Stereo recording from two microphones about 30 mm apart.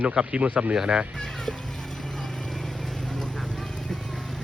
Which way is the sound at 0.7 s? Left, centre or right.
Right.